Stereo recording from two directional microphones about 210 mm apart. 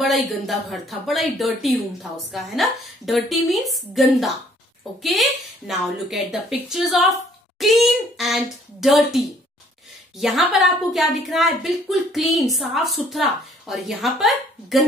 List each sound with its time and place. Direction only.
0.0 s a woman's voice: centre (ahead or behind)